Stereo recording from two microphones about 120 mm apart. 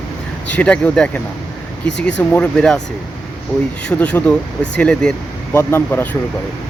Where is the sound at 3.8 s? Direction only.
10° left (ahead or behind).